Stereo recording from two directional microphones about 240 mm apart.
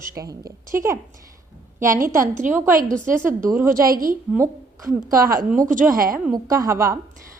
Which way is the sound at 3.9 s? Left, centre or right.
Right.